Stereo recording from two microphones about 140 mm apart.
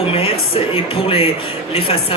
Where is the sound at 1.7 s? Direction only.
40° left (ahead or behind).